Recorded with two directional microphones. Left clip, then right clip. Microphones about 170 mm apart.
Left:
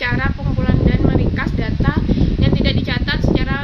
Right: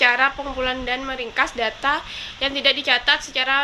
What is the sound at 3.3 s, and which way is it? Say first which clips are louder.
Speech: right 2 dB; 15° left (ahead or behind).